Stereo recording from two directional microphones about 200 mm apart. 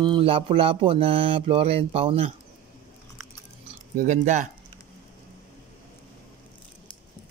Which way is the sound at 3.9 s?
35° right (ahead or behind).